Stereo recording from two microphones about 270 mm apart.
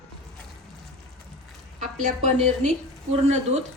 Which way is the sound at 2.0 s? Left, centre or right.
Right.